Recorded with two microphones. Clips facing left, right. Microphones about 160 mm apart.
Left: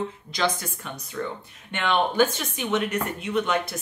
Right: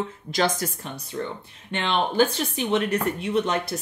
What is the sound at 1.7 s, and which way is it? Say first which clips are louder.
Speech: left 1 dB; 30° right (ahead or behind).